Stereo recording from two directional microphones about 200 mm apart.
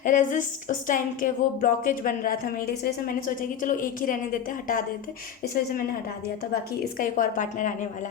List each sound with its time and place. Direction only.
0.0 s speech: 40° left (ahead or behind)
7.0 s a woman's voice: 40° left (ahead or behind)